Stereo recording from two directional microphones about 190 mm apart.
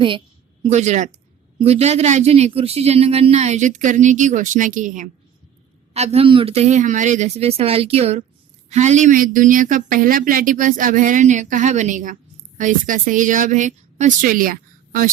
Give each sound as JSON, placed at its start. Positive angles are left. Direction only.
{"t": 0.6, "sound": "speech", "side_deg": -35}